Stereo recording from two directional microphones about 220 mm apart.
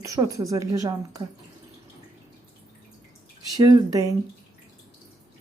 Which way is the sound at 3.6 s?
15° right (ahead or behind).